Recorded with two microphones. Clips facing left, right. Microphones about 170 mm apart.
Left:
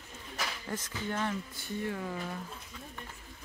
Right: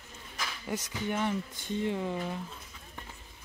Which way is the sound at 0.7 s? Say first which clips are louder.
Right 5 dB; 15° right (ahead or behind).